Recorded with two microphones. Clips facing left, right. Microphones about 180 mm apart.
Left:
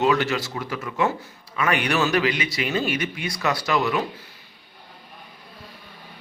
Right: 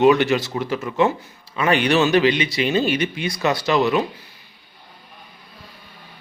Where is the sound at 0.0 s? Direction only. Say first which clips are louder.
Right 6 dB; 20° right (ahead or behind).